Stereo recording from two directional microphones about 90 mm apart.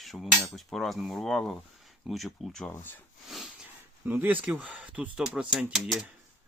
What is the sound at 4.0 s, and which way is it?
Speech, 20° right (ahead or behind).